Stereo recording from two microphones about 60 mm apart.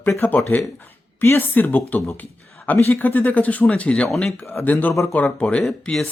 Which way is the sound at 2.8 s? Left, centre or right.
Left.